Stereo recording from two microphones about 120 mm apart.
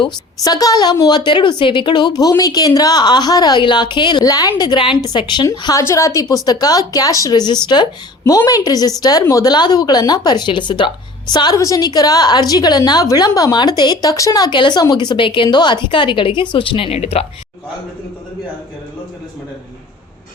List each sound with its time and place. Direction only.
0.0 s a woman's voice: 30° left (ahead or behind)
5.5 s a woman's voice: 25° left (ahead or behind); by 17.2 s 55° left (ahead or behind)